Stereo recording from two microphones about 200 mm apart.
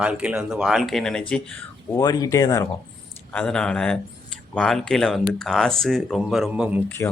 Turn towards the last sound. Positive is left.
turn(degrees=-5)  # may be behind; listen again after turning